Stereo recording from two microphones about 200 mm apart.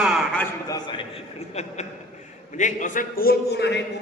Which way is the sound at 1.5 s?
35° left (ahead or behind).